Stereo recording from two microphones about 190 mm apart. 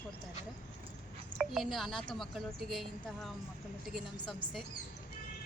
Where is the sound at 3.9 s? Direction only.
Centre (ahead or behind).